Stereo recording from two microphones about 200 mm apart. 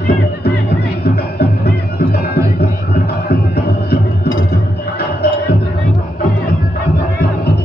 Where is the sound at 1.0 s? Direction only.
50° left (ahead or behind).